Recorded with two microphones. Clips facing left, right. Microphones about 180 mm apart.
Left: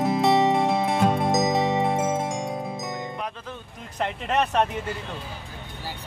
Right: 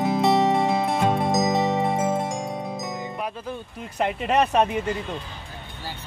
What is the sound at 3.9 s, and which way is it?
Speech, 10° right (ahead or behind).